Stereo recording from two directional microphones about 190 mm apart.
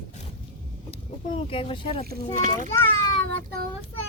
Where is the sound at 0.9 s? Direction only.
30° left (ahead or behind).